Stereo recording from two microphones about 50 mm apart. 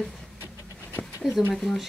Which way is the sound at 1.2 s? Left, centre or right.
Centre.